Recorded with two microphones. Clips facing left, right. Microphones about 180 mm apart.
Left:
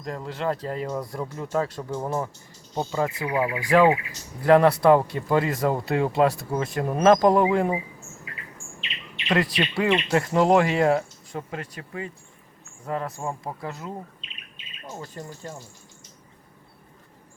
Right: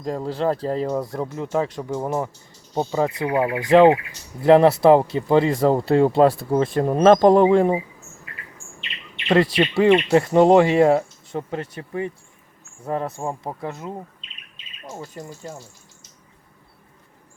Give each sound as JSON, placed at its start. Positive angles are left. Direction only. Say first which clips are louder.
{"t": 0.0, "sound": "speech", "louder": "right 6 dB", "side_deg": -30}
{"t": 9.3, "sound": "speech", "louder": "right 6 dB", "side_deg": -25}